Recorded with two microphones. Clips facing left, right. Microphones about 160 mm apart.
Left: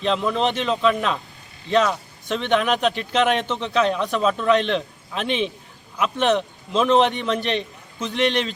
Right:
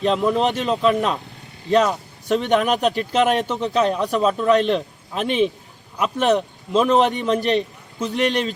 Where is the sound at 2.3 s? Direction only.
40° right (ahead or behind).